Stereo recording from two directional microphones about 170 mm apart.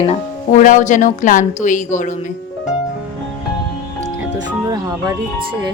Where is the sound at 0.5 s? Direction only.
50° left (ahead or behind).